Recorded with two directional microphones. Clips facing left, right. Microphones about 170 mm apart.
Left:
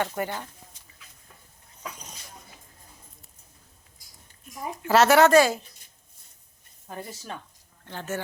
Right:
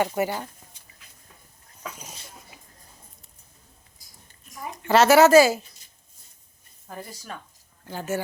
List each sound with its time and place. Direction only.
0.0 s speech: 10° right (ahead or behind)
4.8 s speech: centre (ahead or behind)
7.1 s speech: 25° left (ahead or behind)
7.9 s speech: 10° right (ahead or behind)